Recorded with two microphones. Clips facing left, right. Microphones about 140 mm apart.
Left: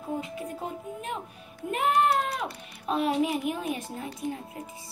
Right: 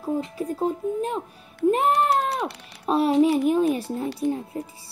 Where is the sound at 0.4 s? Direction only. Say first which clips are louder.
Right 10 dB; 35° right (ahead or behind).